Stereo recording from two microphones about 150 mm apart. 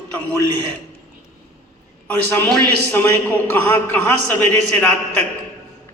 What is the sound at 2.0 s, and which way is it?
A man's voice, 15° left (ahead or behind).